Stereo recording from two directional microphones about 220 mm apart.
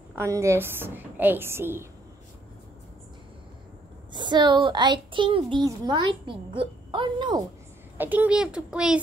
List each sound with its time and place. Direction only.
0.1 s a woman's voice: 10° right (ahead or behind)
4.1 s a woman's voice: 20° right (ahead or behind)
8.0 s a child's voice: 10° right (ahead or behind)